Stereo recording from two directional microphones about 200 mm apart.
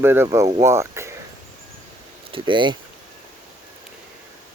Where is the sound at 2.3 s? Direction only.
25° right (ahead or behind).